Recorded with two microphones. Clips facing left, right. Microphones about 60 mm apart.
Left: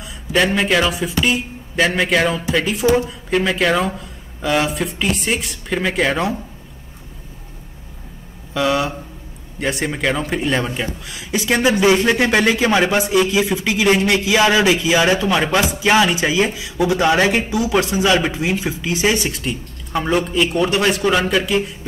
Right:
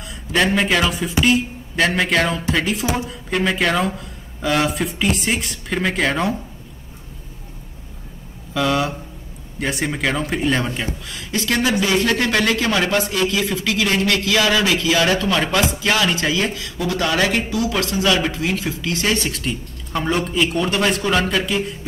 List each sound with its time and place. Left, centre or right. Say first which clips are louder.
0.0 s a sound: left 2 dB; centre
0.6 s speech: left 1 dB; centre
8.5 s speech: left 1 dB; centre
11.4 s speech: left 5 dB; centre